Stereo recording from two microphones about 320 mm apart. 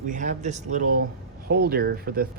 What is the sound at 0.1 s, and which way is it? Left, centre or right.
Speech, right.